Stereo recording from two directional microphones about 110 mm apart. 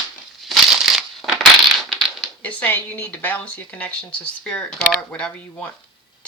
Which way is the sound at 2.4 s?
15° left (ahead or behind).